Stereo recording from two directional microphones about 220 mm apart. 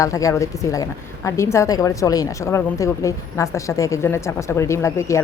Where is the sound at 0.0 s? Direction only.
15° left (ahead or behind).